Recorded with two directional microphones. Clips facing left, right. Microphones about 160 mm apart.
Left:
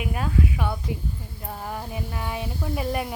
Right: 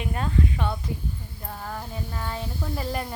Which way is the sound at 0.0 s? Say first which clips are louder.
Left 1 dB; 5° left (ahead or behind).